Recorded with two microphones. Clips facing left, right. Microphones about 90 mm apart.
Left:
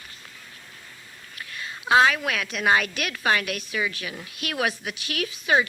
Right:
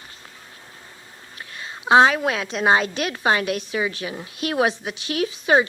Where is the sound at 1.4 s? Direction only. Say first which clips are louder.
Right 1 dB; 25° right (ahead or behind).